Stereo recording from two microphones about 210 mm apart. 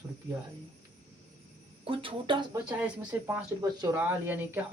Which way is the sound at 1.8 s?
25° right (ahead or behind).